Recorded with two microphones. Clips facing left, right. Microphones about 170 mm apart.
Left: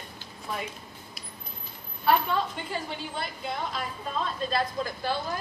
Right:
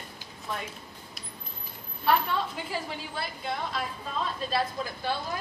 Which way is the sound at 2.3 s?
5° right (ahead or behind).